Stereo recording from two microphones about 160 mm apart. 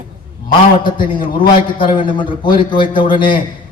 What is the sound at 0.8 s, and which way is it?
A man's voice, 30° left (ahead or behind).